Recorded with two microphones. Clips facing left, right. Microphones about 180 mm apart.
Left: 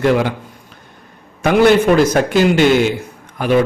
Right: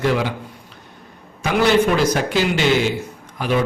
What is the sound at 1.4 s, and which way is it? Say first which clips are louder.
A man's voice: left 5 dB; 55° left (ahead or behind).